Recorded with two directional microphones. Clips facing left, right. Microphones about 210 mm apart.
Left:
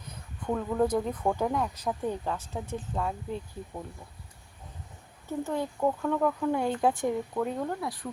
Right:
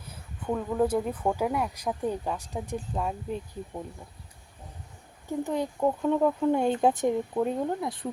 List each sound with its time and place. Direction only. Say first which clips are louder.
0.1 s speech: right 1 dB; 5° right (ahead or behind)
5.4 s speech: right 2 dB; 15° right (ahead or behind)